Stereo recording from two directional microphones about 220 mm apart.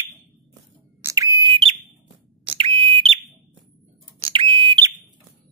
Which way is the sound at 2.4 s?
25° right (ahead or behind).